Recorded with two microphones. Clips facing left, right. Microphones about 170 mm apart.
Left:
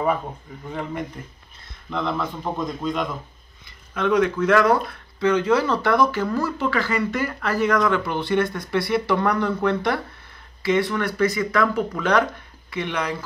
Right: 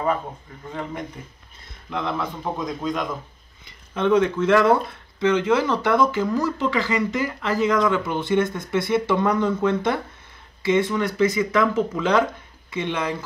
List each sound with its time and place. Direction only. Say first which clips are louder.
1.9 s speech: left 1 dB; 5° right (ahead or behind)
3.9 s speech: right 1 dB; 25° right (ahead or behind)